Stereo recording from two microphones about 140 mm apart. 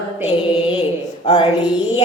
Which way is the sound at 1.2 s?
50° left (ahead or behind).